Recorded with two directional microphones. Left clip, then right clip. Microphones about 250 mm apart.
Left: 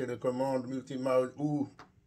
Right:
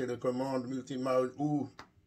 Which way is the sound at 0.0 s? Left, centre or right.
Centre.